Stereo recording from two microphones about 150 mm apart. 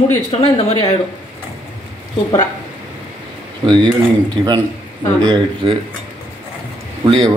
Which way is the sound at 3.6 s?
30° right (ahead or behind).